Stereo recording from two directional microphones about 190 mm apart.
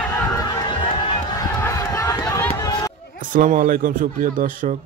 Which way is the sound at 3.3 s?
45° right (ahead or behind).